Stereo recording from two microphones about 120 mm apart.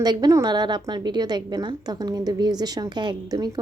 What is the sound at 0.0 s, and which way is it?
A woman's voice, 35° right (ahead or behind).